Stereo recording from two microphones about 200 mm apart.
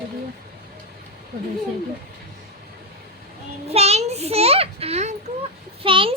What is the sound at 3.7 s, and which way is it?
A child's voice, 30° right (ahead or behind).